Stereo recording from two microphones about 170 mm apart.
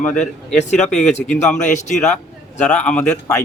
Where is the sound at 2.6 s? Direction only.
5° left (ahead or behind).